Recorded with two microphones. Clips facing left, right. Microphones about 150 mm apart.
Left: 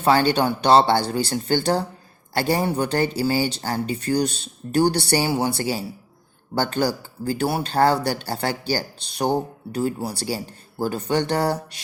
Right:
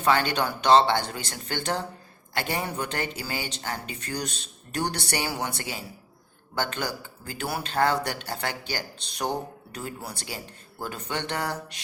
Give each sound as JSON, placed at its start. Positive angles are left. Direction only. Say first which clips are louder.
{"t": 0.0, "sound": "speech", "louder": "left 6 dB", "side_deg": 30}